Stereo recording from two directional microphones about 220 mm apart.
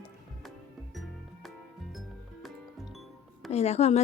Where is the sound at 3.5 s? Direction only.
30° left (ahead or behind).